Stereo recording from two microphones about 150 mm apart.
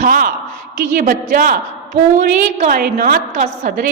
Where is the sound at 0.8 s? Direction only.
65° right (ahead or behind).